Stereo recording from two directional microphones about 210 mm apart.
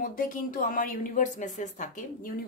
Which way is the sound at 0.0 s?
40° left (ahead or behind).